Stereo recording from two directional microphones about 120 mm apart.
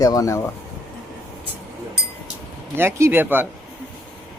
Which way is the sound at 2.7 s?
20° right (ahead or behind).